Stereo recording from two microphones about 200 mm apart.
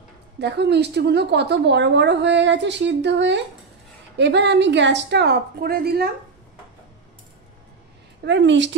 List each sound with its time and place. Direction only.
0.4 s a woman's voice: 55° right (ahead or behind)
8.3 s a woman's voice: 65° right (ahead or behind)